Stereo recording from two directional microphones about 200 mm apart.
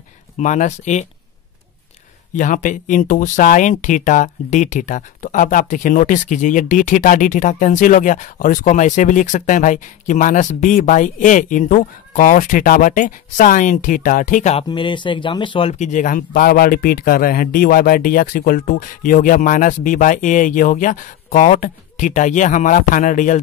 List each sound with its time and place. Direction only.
0.4 s speech: 35° left (ahead or behind)
2.3 s speech: 40° left (ahead or behind)
15.8 s speech: 40° left (ahead or behind)